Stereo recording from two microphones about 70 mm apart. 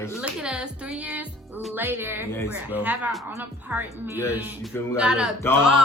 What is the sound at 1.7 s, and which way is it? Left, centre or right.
Speech, right.